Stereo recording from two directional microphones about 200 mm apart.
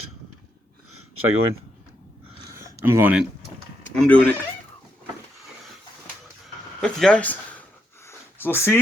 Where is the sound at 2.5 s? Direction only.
15° right (ahead or behind).